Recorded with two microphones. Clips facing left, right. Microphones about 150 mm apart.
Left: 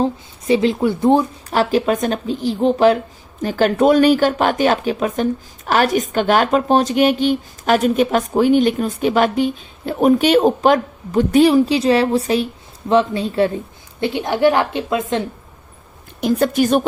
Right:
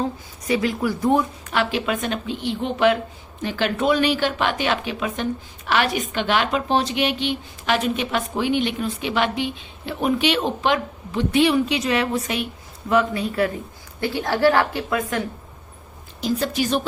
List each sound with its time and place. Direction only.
0.0 s a woman's voice: 25° left (ahead or behind)
16.2 s a woman's voice: 55° left (ahead or behind)